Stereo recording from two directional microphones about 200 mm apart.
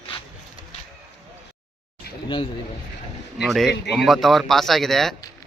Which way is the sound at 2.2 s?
25° left (ahead or behind).